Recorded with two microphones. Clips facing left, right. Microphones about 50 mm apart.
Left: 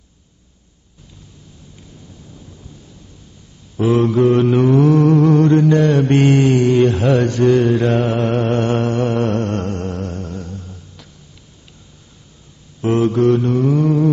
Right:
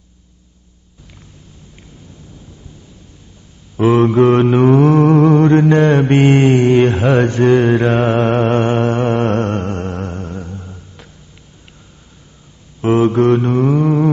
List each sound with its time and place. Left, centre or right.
3.7 s mantra: right
4.2 s mantra: right
4.5 s mantra: right
9.6 s a sound: right
12.8 s mantra: right